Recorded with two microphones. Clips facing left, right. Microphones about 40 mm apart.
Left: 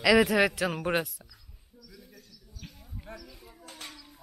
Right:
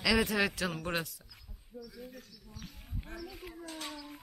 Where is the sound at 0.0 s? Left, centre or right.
Centre.